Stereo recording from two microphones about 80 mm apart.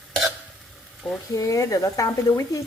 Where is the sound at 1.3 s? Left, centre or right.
Left.